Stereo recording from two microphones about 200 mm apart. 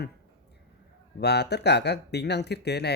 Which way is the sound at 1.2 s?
55° left (ahead or behind).